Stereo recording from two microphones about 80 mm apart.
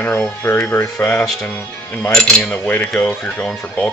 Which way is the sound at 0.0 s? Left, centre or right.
Left.